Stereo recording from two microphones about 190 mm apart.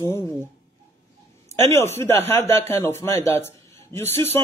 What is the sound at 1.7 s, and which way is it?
Speech, 15° left (ahead or behind).